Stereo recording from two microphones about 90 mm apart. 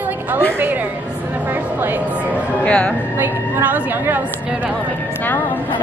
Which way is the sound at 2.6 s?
15° left (ahead or behind).